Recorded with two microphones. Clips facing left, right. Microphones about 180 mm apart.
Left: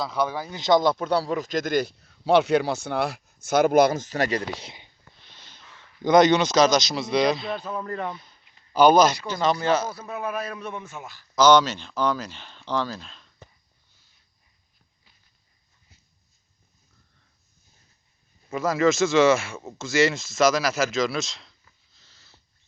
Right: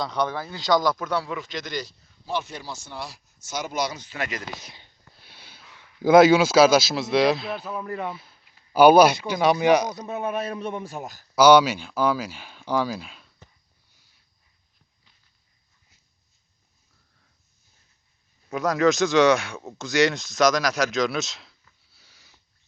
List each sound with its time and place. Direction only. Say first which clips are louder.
0.0 s a man's voice: even; 5° left (ahead or behind); by 4.7 s 35° left (ahead or behind)
5.2 s speech: right 2 dB; 10° right (ahead or behind); by 11.3 s 40° right (ahead or behind)
11.3 s speech: right 2 dB; 10° right (ahead or behind)
18.5 s speech: right 1 dB; centre (ahead or behind)
21.9 s sniff: even; 10° right (ahead or behind)